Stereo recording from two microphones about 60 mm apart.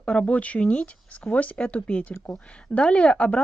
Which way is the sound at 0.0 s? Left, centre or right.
Centre.